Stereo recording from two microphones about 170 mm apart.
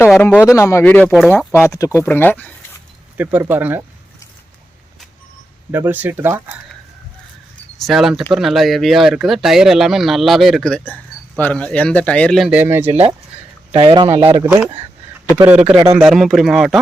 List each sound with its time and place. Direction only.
0.2 s speech: 10° left (ahead or behind)
3.2 s speech: 10° right (ahead or behind)
5.7 s speech: 10° right (ahead or behind)
7.8 s speech: centre (ahead or behind)
12.5 s speech: 10° right (ahead or behind)
12.9 s speech: 35° right (ahead or behind)
14.4 s speech: 5° right (ahead or behind)